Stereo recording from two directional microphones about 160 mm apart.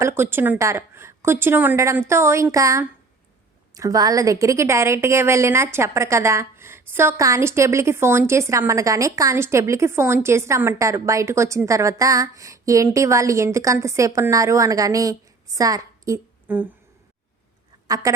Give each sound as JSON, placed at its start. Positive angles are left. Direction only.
{"t": 0.0, "sound": "a woman's voice", "side_deg": -15}
{"t": 17.8, "sound": "speech", "side_deg": -25}